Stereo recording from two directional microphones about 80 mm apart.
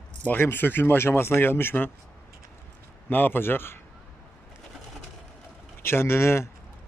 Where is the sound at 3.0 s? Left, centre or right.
Left.